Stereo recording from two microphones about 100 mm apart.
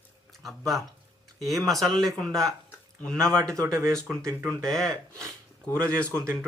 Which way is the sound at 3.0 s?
5° left (ahead or behind).